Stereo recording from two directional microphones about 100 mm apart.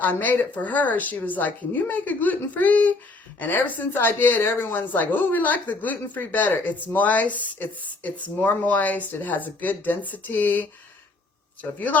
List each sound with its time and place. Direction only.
0.0 s a woman's voice: 15° left (ahead or behind)